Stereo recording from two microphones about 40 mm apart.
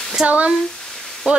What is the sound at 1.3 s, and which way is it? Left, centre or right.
Speech, right.